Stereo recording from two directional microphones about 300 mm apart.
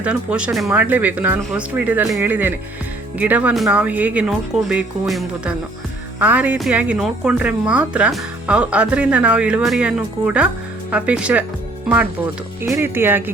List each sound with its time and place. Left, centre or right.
0.0 s speech: centre
12.6 s speech: centre